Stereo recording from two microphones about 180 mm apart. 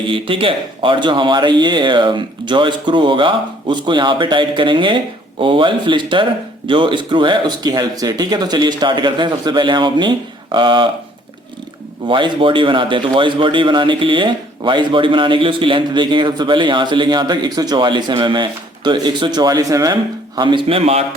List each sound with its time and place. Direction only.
0.1 s a man's voice: 30° right (ahead or behind)
12.0 s a man's voice: 25° right (ahead or behind)